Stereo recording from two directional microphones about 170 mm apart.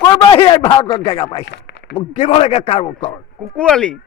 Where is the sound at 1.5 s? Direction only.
90° left.